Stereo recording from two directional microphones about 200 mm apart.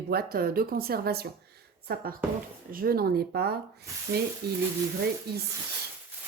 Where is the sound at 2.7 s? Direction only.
50° right (ahead or behind).